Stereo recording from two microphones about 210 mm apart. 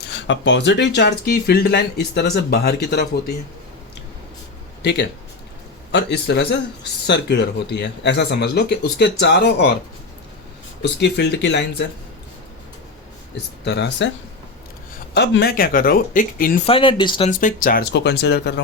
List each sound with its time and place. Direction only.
0.1 s speech: 60° left (ahead or behind)
4.8 s speech: 55° left (ahead or behind)
10.8 s speech: 55° left (ahead or behind)
13.7 s speech: 55° left (ahead or behind)
15.1 s speech: 50° left (ahead or behind)
16.6 s speech: 25° left (ahead or behind)
17.3 s speech: 40° left (ahead or behind)